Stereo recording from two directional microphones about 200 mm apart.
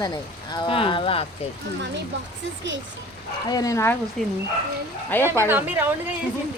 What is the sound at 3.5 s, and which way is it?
Speech, 15° left (ahead or behind).